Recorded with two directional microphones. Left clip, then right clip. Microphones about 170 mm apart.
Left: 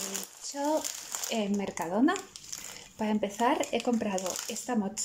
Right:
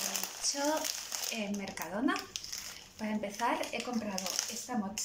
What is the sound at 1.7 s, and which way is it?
Speech, 35° left (ahead or behind).